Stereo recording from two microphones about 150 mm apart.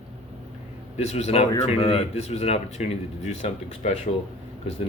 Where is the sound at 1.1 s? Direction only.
45° left (ahead or behind).